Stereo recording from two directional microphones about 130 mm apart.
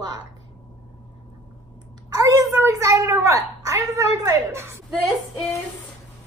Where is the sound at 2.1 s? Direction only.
25° right (ahead or behind).